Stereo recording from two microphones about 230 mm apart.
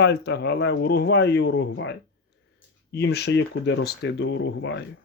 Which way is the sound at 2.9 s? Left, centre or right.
Left.